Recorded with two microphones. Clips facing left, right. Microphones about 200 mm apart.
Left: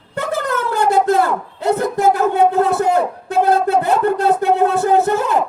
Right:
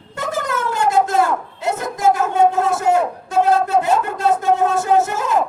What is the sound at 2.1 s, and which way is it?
Speech, 35° left (ahead or behind).